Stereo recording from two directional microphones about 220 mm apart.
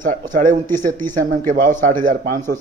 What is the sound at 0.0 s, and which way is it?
Speech, 35° right (ahead or behind).